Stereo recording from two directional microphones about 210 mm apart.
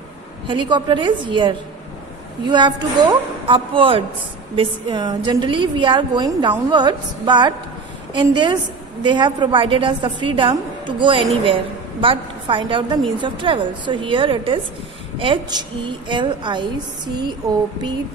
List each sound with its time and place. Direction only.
0.5 s a woman's voice: 20° right (ahead or behind)